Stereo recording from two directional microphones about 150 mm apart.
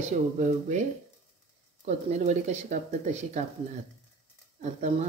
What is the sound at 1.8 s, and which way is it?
Speech, 50° right (ahead or behind).